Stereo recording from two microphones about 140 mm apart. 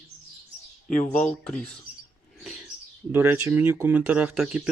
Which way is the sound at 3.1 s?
15° right (ahead or behind).